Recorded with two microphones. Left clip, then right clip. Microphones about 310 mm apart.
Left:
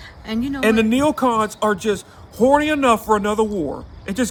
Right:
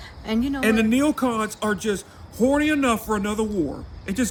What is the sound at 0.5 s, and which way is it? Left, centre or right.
A man's voice, centre.